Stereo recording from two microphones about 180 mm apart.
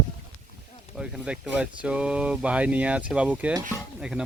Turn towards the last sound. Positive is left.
turn(degrees=-5)  # may be behind; listen again after turning